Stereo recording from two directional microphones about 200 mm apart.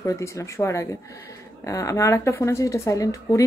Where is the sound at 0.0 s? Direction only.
15° left (ahead or behind).